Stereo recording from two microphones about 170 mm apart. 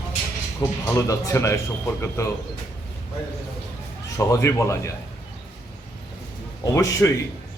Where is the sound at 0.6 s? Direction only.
15° left (ahead or behind).